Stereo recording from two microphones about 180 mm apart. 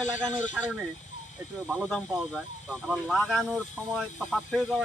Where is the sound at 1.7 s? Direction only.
Centre (ahead or behind).